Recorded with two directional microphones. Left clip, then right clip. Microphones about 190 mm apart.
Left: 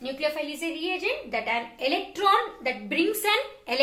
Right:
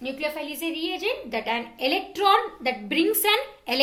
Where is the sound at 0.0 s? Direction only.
35° right (ahead or behind).